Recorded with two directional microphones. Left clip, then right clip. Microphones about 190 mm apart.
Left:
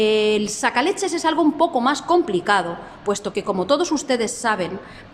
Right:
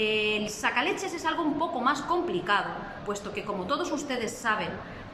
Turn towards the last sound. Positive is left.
turn(degrees=40)  # may be behind; listen again after turning